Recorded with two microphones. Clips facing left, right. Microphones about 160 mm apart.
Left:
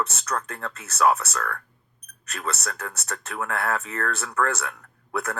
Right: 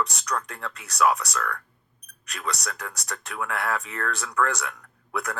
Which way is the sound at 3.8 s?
40° left (ahead or behind).